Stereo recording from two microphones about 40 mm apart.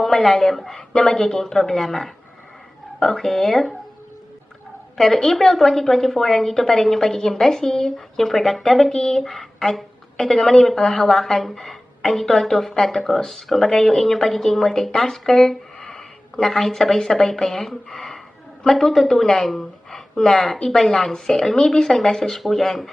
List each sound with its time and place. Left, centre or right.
0.0 s a woman's voice: centre
4.9 s a woman's voice: centre
8.9 s speech: left
9.1 s a woman's voice: centre